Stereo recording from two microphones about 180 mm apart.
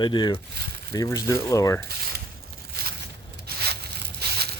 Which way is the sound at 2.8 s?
60° right (ahead or behind).